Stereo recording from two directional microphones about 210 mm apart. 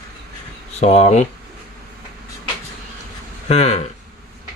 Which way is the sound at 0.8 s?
30° left (ahead or behind).